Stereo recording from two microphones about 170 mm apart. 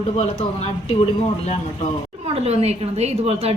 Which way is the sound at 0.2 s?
40° left (ahead or behind).